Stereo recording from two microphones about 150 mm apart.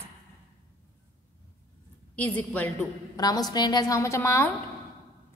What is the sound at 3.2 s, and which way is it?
A woman's voice, 25° left (ahead or behind).